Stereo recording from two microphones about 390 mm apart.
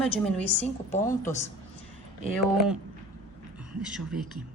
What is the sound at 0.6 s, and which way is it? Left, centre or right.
Speech, centre.